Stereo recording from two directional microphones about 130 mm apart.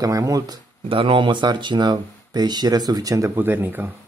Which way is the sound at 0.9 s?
40° right (ahead or behind).